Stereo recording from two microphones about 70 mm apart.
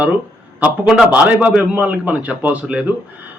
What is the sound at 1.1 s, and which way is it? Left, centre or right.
A man's voice, centre.